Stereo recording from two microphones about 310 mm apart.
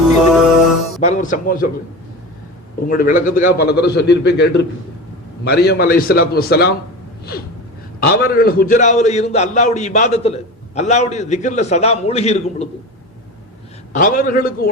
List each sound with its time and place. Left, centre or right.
1.0 s a man's voice: left
2.8 s a man's voice: left
8.0 s a man's voice: left
13.9 s a man's voice: left